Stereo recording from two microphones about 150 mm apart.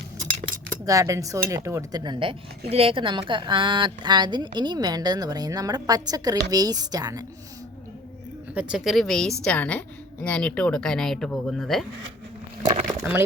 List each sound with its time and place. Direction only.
0.9 s speech: 20° right (ahead or behind)
8.5 s a woman's voice: 5° right (ahead or behind)
13.0 s speech: 15° right (ahead or behind)